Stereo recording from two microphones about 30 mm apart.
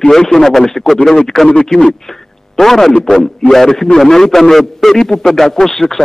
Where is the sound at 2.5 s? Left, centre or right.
Centre.